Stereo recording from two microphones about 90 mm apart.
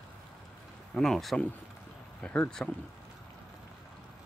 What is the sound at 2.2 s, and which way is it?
Speech, 20° left (ahead or behind).